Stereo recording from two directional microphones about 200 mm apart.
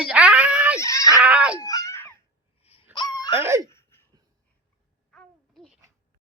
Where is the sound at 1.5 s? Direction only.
15° left (ahead or behind).